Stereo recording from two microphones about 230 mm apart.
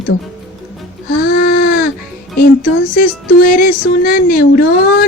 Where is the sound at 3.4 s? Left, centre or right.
Left.